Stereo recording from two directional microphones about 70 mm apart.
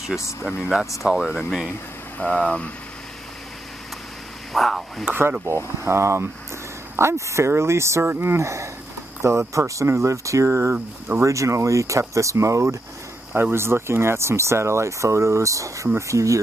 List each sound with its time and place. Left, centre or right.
0.6 s speech: centre
2.2 s speech: centre
4.5 s a sound: centre
5.9 s speech: right
10.7 s speech: right
11.2 s speech: right
13.3 s speech: right